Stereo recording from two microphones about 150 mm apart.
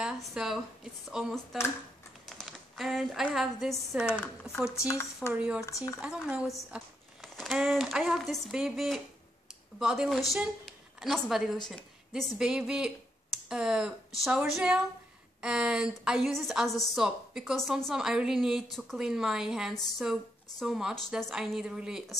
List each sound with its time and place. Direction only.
0.0 s a woman's voice: 5° right (ahead or behind)
2.2 s a sound: centre (ahead or behind)
3.3 s a woman's voice: centre (ahead or behind)
4.7 s speech: 20° left (ahead or behind)
5.3 s a woman's voice: 10° right (ahead or behind)